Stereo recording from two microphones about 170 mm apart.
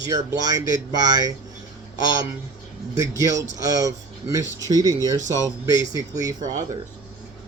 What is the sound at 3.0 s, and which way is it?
Speech, 20° right (ahead or behind).